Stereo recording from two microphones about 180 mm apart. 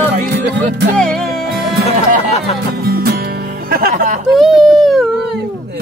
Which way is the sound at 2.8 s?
60° right (ahead or behind).